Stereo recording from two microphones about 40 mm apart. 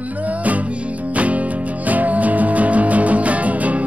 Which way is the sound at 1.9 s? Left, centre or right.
Right.